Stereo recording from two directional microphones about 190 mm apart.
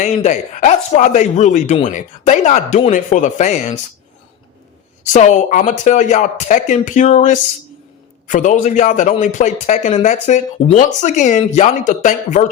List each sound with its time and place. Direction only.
0.0 s speech: 40° left (ahead or behind)
5.1 s speech: 40° left (ahead or behind)